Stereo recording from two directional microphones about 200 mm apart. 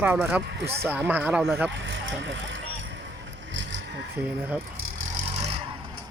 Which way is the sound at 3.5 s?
65° right (ahead or behind).